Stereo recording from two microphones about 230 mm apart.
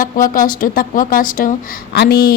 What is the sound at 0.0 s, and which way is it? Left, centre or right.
Speech, left.